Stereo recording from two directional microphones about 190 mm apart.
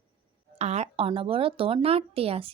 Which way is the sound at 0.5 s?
35° right (ahead or behind).